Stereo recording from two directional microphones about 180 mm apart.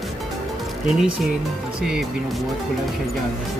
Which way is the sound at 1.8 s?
5° right (ahead or behind).